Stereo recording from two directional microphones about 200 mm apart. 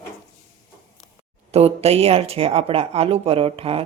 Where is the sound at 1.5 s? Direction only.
30° right (ahead or behind).